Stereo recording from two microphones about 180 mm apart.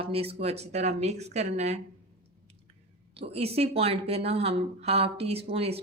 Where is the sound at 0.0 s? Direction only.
30° right (ahead or behind).